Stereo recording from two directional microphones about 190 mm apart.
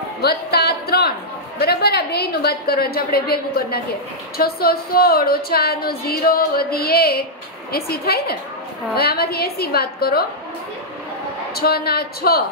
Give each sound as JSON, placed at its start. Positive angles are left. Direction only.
{"t": 0.2, "sound": "a woman's voice", "side_deg": 55}
{"t": 11.5, "sound": "a woman's voice", "side_deg": 55}